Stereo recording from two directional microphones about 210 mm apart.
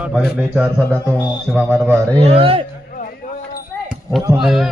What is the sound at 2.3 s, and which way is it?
Speech, 25° right (ahead or behind).